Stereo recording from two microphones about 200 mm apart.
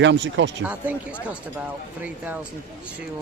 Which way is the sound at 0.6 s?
5° right (ahead or behind).